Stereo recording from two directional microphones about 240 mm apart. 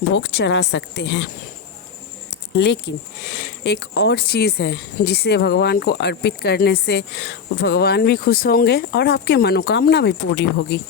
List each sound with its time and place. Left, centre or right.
0.1 s speech: left
2.6 s speech: left